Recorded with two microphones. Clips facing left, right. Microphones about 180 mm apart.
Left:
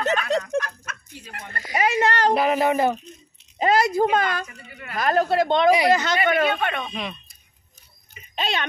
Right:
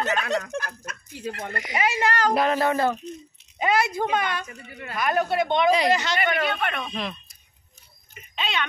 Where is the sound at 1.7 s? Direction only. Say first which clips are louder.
Left 3 dB; 35° left (ahead or behind).